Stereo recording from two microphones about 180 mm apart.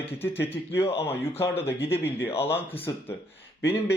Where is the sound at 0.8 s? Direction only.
35° left (ahead or behind).